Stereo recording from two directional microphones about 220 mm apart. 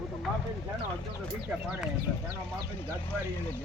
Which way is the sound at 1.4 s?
10° right (ahead or behind).